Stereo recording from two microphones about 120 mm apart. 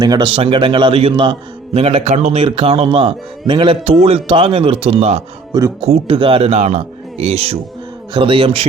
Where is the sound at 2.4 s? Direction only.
50° right (ahead or behind).